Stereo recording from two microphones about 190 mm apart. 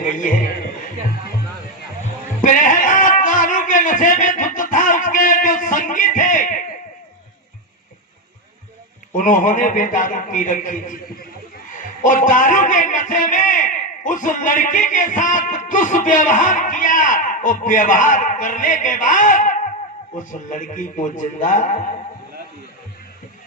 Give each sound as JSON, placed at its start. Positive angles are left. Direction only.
{"t": 0.0, "sound": "a man's voice", "side_deg": 45}
{"t": 2.4, "sound": "a sound", "side_deg": 45}
{"t": 9.1, "sound": "a man's voice", "side_deg": 40}